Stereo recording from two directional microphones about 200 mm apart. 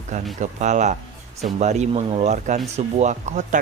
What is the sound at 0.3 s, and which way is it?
A man's voice, 35° right (ahead or behind).